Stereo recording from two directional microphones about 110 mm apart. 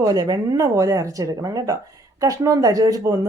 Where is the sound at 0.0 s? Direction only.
40° right (ahead or behind).